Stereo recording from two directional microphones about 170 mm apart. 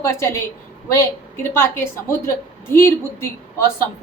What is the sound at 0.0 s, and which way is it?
Speech, 15° left (ahead or behind).